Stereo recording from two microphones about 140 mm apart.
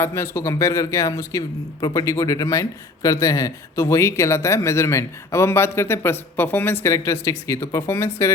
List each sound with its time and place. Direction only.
0.0 s a man's voice: 15° left (ahead or behind)